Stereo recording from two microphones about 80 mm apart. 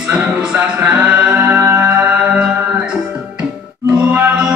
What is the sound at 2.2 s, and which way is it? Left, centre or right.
Music, centre.